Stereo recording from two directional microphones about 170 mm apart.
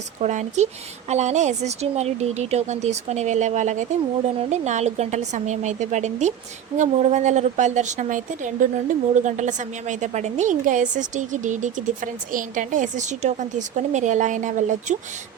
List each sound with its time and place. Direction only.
0.2 s a woman's voice: 45° right (ahead or behind)